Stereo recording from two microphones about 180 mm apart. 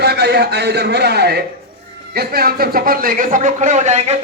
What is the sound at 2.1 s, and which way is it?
A man's voice, 60° right (ahead or behind).